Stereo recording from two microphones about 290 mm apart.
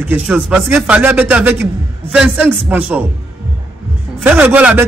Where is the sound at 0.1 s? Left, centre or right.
Centre.